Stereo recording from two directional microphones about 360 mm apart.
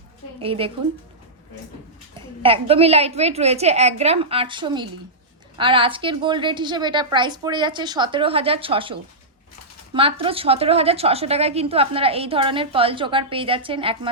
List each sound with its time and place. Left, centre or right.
0.3 s a woman's voice: centre
2.1 s a woman's voice: centre